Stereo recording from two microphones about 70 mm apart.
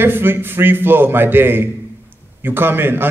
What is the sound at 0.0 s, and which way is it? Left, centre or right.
A man's voice, right.